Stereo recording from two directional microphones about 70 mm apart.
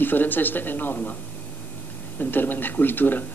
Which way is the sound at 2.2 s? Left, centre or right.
Left.